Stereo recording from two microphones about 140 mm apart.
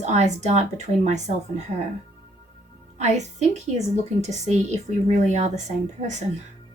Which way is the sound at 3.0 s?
55° right (ahead or behind).